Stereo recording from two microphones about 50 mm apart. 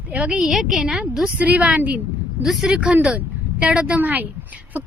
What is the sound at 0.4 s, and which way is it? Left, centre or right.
Speech, centre.